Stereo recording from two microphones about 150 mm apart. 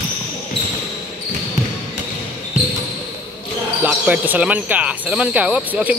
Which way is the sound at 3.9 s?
10° right (ahead or behind).